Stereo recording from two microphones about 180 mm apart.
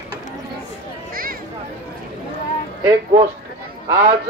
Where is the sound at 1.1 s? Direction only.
55° right (ahead or behind).